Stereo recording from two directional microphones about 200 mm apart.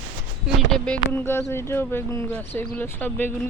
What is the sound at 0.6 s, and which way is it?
Speech, 5° left (ahead or behind).